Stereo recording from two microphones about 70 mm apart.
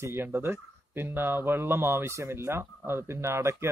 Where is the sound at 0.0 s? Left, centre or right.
Right.